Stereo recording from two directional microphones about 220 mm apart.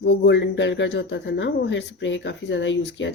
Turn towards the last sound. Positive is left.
turn(degrees=55)  # may be behind; listen again after turning